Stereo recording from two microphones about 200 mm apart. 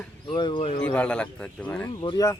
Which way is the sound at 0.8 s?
5° left (ahead or behind).